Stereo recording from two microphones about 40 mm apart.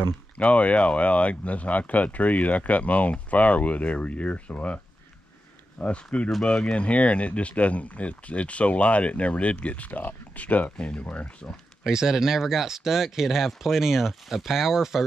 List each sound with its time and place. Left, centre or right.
0.4 s speech: left
5.8 s speech: left
11.8 s speech: centre